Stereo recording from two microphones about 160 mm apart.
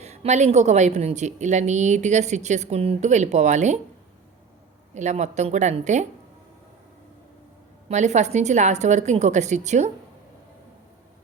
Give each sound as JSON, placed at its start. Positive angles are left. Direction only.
{"t": 0.0, "sound": "a woman's voice", "side_deg": -45}
{"t": 4.9, "sound": "a woman's voice", "side_deg": -45}
{"t": 7.9, "sound": "a woman's voice", "side_deg": -45}